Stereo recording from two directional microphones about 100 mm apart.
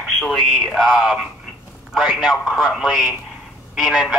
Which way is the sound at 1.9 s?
5° right (ahead or behind).